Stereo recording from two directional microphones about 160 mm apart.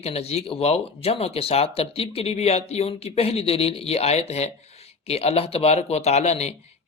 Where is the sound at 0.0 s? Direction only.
40° left (ahead or behind).